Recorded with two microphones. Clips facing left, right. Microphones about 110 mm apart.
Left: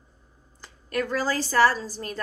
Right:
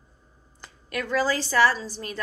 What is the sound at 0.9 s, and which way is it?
A woman's voice, 40° left (ahead or behind).